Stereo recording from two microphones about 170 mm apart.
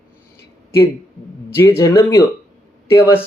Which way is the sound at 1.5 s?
15° left (ahead or behind).